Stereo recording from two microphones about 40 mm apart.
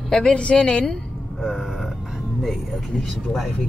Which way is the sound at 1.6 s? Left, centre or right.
Centre.